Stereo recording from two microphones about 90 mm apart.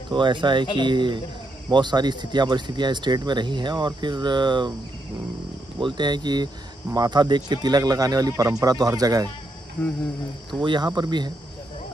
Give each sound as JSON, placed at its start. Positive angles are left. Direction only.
{"t": 0.1, "sound": "speech", "side_deg": -60}
{"t": 5.8, "sound": "speech", "side_deg": -60}
{"t": 9.8, "sound": "speech", "side_deg": 15}
{"t": 10.6, "sound": "speech", "side_deg": -55}